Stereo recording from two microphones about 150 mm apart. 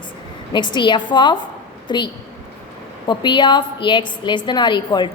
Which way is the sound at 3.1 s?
30° left (ahead or behind).